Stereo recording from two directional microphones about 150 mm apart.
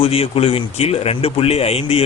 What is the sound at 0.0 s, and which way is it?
A man's voice, 40° left (ahead or behind).